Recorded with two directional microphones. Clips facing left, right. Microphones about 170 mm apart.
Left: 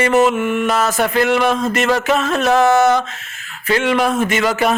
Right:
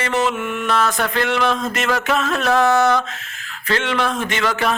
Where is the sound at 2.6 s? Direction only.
20° left (ahead or behind).